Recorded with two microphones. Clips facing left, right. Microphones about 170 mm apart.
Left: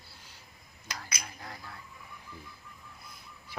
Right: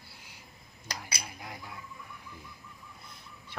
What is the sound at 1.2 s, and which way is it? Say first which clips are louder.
Speech: right 1 dB; 15° right (ahead or behind).